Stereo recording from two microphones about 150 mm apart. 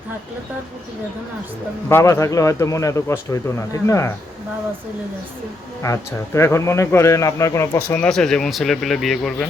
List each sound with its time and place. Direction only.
1.9 s speech: 20° left (ahead or behind)
5.8 s speech: 20° left (ahead or behind)
7.9 s speech: 10° left (ahead or behind)